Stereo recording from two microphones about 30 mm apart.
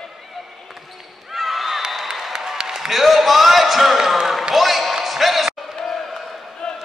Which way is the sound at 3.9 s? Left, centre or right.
Centre.